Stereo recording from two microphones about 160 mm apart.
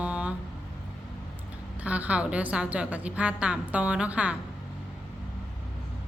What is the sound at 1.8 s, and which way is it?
Music, 10° right (ahead or behind).